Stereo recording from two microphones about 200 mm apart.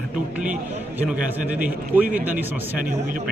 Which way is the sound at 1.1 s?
5° right (ahead or behind).